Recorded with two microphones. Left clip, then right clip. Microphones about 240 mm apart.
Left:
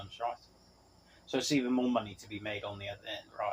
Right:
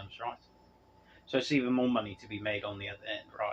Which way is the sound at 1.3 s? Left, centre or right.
Right.